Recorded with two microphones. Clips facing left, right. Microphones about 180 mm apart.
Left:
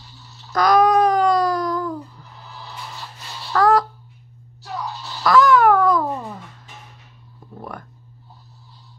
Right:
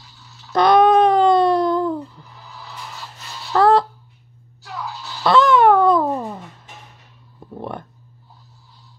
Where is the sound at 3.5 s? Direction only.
30° right (ahead or behind).